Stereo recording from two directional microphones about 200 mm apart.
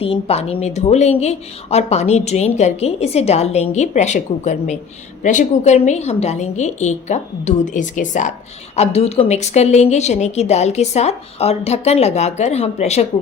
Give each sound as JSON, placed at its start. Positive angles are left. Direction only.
{"t": 0.0, "sound": "a woman's voice", "side_deg": 30}